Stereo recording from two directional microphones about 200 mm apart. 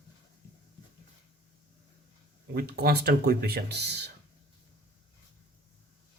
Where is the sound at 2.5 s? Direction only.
50° right (ahead or behind).